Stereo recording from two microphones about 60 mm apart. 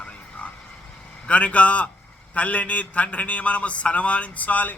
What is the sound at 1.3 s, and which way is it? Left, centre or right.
A man's voice, left.